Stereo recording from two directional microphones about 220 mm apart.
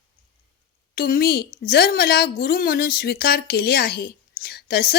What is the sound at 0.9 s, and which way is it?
Speech, 45° left (ahead or behind).